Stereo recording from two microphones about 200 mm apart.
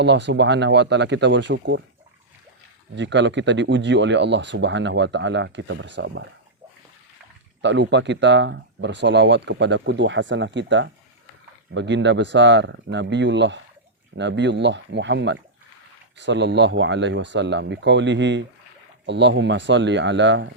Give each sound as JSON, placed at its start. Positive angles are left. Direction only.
{"t": 0.0, "sound": "speech", "side_deg": -60}
{"t": 2.9, "sound": "speech", "side_deg": -65}
{"t": 7.6, "sound": "speech", "side_deg": -60}